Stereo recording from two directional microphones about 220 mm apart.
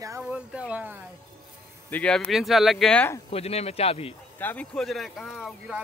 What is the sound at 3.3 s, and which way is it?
Speech, 30° left (ahead or behind).